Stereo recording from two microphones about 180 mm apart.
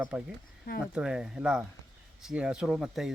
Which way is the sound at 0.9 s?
5° right (ahead or behind).